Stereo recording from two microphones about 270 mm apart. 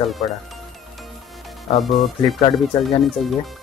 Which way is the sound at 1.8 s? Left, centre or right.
Centre.